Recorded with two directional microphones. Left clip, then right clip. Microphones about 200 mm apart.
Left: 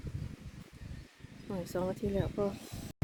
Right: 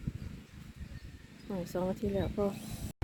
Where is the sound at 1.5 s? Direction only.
Centre (ahead or behind).